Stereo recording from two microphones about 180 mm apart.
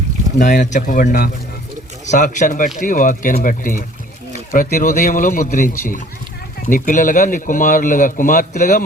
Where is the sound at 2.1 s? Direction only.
45° left (ahead or behind).